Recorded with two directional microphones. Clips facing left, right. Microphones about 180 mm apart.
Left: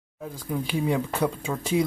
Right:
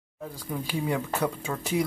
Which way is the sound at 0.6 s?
15° left (ahead or behind).